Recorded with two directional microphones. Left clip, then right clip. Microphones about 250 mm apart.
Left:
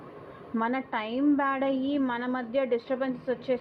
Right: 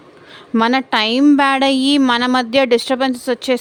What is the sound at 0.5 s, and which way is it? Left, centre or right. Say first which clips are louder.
A woman's voice: right 15 dB; right.